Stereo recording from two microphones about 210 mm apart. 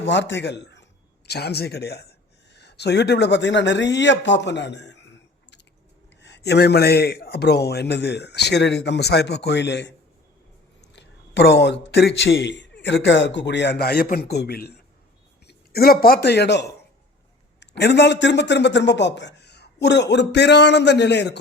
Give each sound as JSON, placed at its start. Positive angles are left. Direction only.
{"t": 0.0, "sound": "a man's voice", "side_deg": 55}
{"t": 6.2, "sound": "a man's voice", "side_deg": 55}
{"t": 10.9, "sound": "a man's voice", "side_deg": 55}